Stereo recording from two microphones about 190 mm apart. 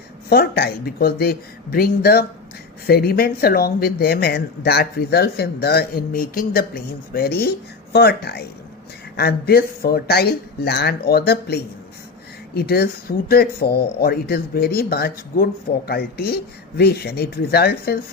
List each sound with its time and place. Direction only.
0.3 s speech: 55° left (ahead or behind)